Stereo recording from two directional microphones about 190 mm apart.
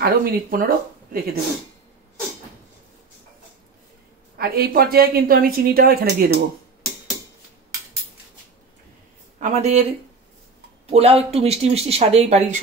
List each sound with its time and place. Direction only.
0.0 s speech: 50° right (ahead or behind)
4.4 s speech: 50° right (ahead or behind)
9.4 s speech: 35° right (ahead or behind)
10.9 s speech: 35° right (ahead or behind)